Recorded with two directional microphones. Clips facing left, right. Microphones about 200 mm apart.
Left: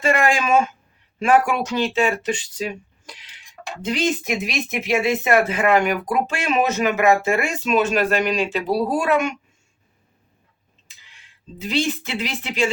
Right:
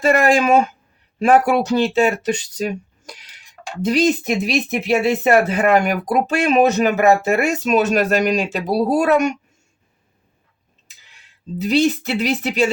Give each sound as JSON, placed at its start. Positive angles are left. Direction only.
{"t": 0.0, "sound": "speech", "side_deg": -40}
{"t": 11.5, "sound": "speech", "side_deg": -40}